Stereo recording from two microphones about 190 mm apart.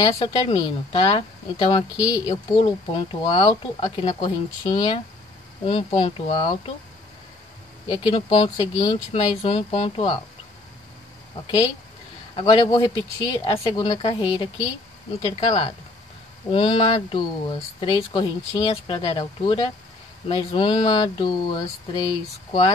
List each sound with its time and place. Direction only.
0.0 s speech: 25° left (ahead or behind)
7.9 s speech: 25° left (ahead or behind)
12.4 s speech: 20° left (ahead or behind)